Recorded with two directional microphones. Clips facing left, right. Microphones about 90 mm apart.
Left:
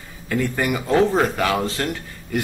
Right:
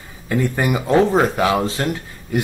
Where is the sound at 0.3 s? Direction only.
20° right (ahead or behind).